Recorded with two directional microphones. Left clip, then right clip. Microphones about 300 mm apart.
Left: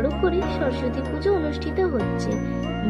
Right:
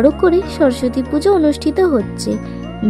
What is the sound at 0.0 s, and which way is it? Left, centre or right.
Speech, right.